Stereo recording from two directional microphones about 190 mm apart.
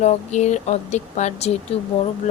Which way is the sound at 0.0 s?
35° left (ahead or behind).